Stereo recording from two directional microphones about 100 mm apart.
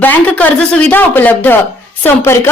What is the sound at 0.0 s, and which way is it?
A woman's voice, 15° left (ahead or behind).